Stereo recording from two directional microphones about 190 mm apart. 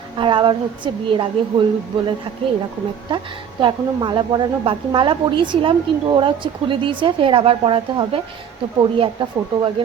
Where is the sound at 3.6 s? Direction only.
25° right (ahead or behind).